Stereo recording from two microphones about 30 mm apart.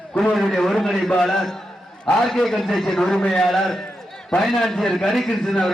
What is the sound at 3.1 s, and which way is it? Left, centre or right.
Speech, left.